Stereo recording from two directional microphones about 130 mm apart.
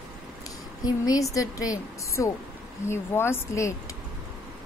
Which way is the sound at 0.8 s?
30° left (ahead or behind).